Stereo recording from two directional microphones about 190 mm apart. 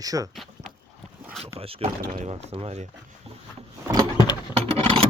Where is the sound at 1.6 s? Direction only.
30° right (ahead or behind).